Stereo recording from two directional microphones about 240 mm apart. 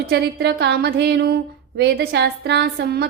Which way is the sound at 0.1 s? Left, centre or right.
Right.